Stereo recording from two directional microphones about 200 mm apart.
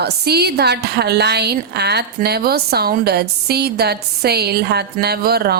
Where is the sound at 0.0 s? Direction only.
55° right (ahead or behind).